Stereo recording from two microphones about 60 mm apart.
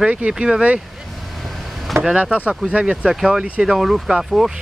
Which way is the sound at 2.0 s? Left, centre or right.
Centre.